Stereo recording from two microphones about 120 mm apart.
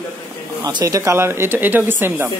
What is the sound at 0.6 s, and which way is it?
Speech, 35° right (ahead or behind).